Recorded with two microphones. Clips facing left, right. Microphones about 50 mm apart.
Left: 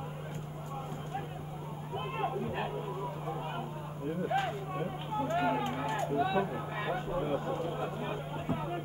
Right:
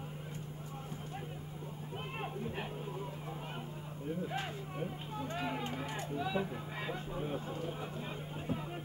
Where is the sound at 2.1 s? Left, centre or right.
Centre.